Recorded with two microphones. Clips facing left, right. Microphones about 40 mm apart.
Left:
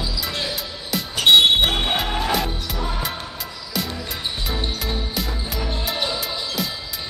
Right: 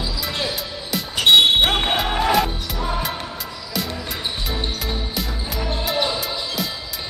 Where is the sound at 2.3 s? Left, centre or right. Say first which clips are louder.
Right 4 dB; centre.